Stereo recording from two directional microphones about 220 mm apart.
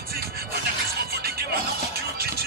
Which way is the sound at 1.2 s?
45° right (ahead or behind).